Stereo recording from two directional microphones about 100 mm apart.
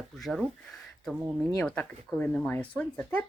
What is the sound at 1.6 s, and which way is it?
Speech, 10° left (ahead or behind).